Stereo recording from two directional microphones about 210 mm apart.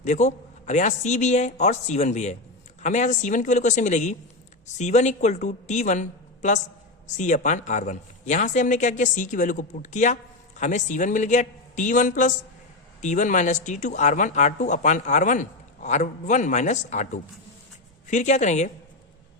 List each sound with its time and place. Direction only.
0.0 s speech: 35° left (ahead or behind)